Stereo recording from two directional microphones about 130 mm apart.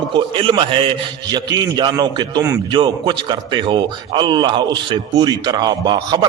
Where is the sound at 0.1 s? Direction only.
40° right (ahead or behind).